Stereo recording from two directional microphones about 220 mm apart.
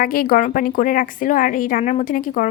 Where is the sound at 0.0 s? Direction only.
40° left (ahead or behind).